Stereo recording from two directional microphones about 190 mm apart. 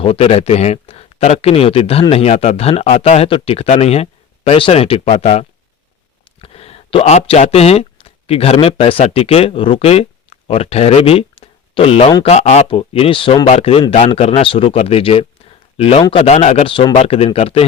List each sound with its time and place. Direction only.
0.0 s speech: 30° left (ahead or behind)